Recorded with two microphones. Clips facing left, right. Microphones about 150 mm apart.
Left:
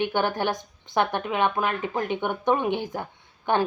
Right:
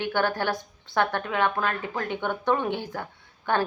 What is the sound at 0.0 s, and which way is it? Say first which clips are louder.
A woman's voice: left 1 dB; 20° left (ahead or behind).